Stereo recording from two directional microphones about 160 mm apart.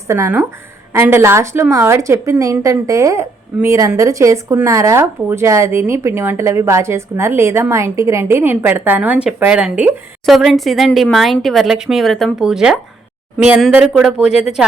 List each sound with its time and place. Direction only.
0.1 s a woman's voice: 20° right (ahead or behind)